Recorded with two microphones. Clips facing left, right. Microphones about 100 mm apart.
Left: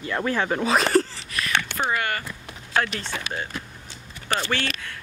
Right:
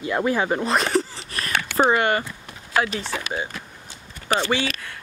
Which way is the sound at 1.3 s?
40° right (ahead or behind).